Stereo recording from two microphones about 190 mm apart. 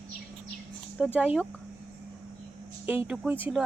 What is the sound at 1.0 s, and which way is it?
Speech, 5° right (ahead or behind).